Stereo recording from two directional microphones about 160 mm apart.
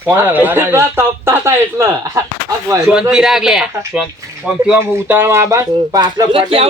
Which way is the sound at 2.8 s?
5° right (ahead or behind).